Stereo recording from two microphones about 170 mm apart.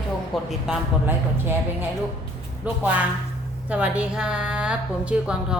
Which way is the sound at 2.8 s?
10° right (ahead or behind).